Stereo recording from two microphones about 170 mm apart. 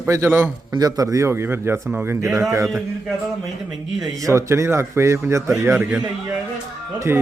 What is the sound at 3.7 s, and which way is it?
Speech, centre (ahead or behind).